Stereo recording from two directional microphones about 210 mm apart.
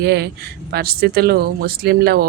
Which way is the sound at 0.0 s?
50° right (ahead or behind).